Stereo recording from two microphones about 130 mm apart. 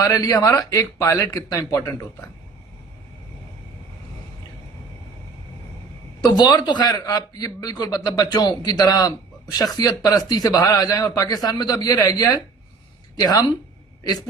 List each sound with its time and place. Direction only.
0.0 s speech: 25° left (ahead or behind)
6.3 s a man's voice: 35° left (ahead or behind)